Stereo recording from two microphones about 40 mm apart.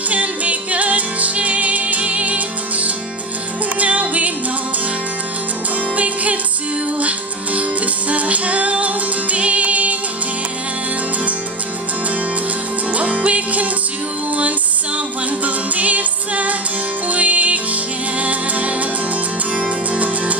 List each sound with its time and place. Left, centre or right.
0.1 s music: right
5.9 s music: right
12.9 s music: right
15.4 s music: right